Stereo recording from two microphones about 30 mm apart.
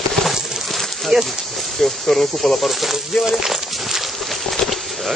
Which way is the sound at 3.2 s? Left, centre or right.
Centre.